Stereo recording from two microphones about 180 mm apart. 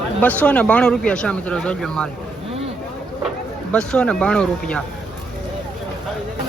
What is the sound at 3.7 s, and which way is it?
Speech, 5° left (ahead or behind).